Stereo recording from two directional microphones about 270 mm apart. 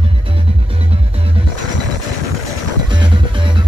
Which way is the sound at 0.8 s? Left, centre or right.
Right.